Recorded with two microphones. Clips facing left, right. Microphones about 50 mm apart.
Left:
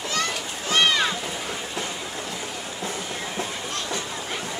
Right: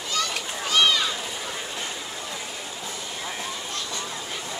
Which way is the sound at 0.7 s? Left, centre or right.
Left.